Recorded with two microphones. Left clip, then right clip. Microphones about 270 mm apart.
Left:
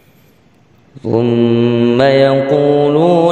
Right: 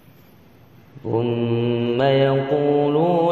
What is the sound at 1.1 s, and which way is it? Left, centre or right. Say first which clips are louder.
Mantra: left 9 dB; left.